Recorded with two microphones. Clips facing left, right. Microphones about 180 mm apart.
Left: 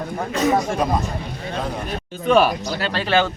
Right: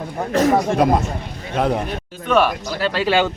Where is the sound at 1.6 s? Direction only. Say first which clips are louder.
Right 9 dB; 70° right (ahead or behind).